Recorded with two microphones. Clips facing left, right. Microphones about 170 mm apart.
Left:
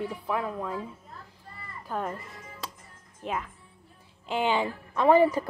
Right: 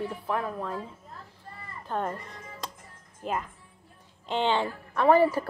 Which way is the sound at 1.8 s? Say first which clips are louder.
Right 1 dB; 5° left (ahead or behind).